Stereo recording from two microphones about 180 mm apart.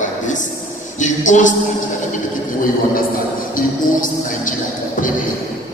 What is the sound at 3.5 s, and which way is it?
Speech, 45° left (ahead or behind).